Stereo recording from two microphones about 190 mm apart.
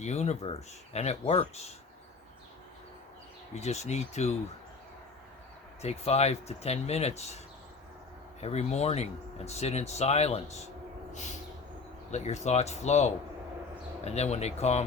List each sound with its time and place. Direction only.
0.0 s speech: 35° left (ahead or behind)
3.5 s speech: 35° left (ahead or behind)
5.8 s speech: 35° left (ahead or behind)
8.4 s speech: 35° left (ahead or behind)
11.1 s a sound: 40° left (ahead or behind)
12.1 s speech: 35° left (ahead or behind)